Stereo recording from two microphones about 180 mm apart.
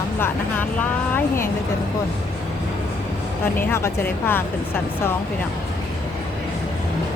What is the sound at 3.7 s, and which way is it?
Speech, 15° left (ahead or behind).